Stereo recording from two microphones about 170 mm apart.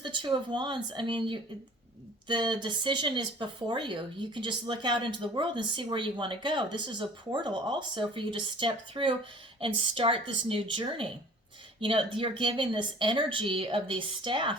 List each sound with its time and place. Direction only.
0.0 s speech: 30° right (ahead or behind)